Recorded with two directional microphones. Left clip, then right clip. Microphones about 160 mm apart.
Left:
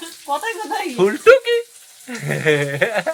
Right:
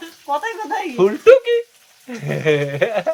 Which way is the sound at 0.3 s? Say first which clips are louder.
Right 1 dB; 40° left (ahead or behind).